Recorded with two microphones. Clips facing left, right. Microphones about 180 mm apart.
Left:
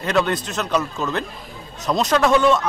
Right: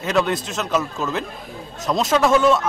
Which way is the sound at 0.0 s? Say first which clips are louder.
Even; centre (ahead or behind).